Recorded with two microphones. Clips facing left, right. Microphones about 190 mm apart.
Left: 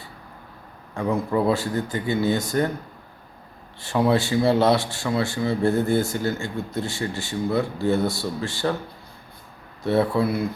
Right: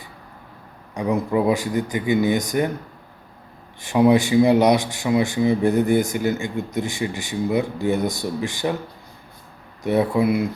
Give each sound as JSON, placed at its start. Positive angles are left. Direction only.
{"t": 0.9, "sound": "speech", "side_deg": -15}
{"t": 3.8, "sound": "speech", "side_deg": -15}
{"t": 9.8, "sound": "speech", "side_deg": -15}